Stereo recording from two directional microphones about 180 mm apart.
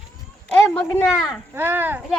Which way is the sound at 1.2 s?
10° right (ahead or behind).